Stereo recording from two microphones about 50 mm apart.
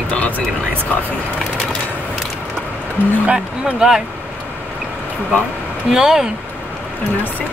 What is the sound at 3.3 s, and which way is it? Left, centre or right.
Speech, right.